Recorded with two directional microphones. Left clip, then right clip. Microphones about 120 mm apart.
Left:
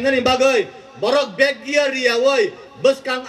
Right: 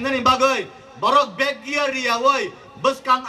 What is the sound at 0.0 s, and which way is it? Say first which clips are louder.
A man's voice: left 2 dB; 30° right (ahead or behind).